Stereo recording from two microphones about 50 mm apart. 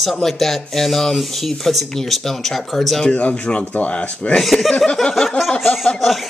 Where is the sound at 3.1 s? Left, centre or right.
Left.